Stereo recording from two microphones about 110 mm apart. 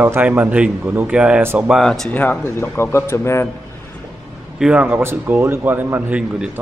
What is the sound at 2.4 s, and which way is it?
Speech, 25° left (ahead or behind).